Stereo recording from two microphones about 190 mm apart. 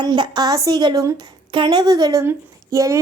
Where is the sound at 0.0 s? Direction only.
20° right (ahead or behind).